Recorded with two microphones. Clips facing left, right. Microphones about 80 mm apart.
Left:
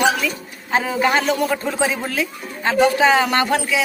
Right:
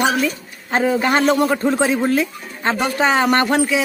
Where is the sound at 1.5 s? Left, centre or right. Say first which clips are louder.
Right 4 dB; right.